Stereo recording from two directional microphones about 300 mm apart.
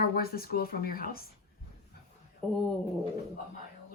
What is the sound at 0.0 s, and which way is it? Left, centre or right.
Speech, left.